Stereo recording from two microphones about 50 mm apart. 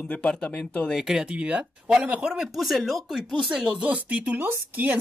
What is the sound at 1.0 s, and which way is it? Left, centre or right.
A woman's voice, centre.